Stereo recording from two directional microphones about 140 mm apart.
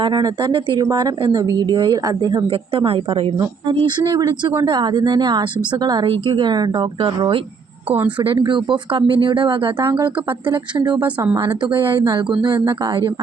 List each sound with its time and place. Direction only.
0.0 s speech: 30° right (ahead or behind)
9.9 s speech: 10° right (ahead or behind)
11.6 s speech: 35° right (ahead or behind)